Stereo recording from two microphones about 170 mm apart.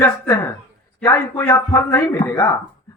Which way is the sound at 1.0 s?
15° left (ahead or behind).